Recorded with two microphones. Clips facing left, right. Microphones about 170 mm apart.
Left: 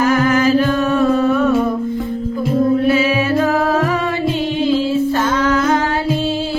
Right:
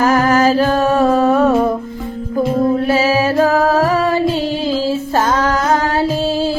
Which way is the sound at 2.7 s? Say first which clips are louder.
Even; 35° right (ahead or behind).